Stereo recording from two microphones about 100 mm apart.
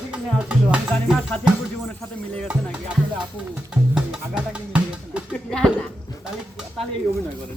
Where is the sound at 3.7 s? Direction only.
10° right (ahead or behind).